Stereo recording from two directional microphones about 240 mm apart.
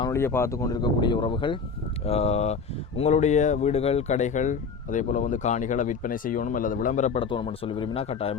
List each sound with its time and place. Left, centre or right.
0.0 s speech: centre